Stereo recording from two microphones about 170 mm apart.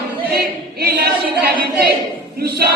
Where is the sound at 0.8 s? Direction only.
65° right (ahead or behind).